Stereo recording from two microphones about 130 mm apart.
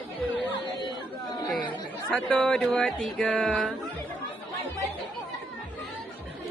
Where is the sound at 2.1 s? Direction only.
5° left (ahead or behind).